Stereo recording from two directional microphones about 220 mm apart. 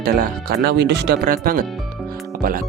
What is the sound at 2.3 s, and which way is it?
Music, 45° right (ahead or behind).